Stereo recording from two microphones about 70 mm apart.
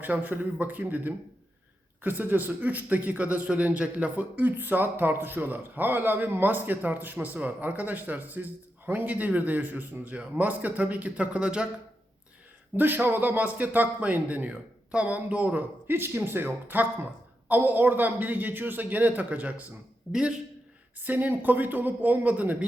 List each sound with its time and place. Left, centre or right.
0.0 s a man's voice: right
12.7 s a man's voice: right
20.1 s a man's voice: centre
21.0 s a man's voice: right